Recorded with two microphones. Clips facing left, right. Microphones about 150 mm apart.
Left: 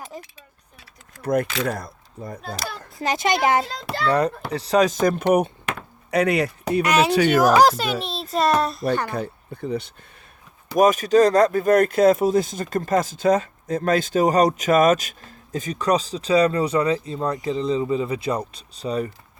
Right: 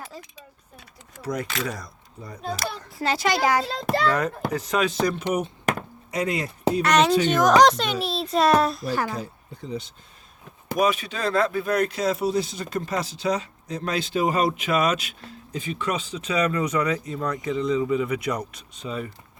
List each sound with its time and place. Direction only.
0.1 s speech: 20° left (ahead or behind)
1.2 s speech: 55° left (ahead or behind)
3.0 s a child's voice: 20° left (ahead or behind)
4.0 s speech: 35° left (ahead or behind); by 5.5 s 55° left (ahead or behind)
5.7 s a sound: 40° right (ahead or behind)
6.1 s speech: 65° left (ahead or behind)
6.8 s a child's voice: 5° left (ahead or behind)
9.0 s speech: 60° left (ahead or behind)
10.8 s speech: 45° left (ahead or behind)